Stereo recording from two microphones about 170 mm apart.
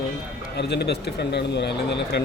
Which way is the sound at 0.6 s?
80° left.